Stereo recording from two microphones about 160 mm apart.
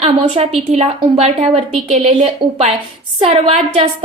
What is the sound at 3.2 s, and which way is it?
Speech, 35° right (ahead or behind).